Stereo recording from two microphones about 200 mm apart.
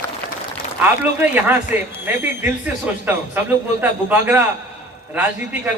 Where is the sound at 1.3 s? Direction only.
10° right (ahead or behind).